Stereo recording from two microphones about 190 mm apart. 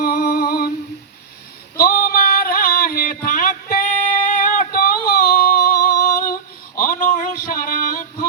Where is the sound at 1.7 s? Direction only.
50° left (ahead or behind).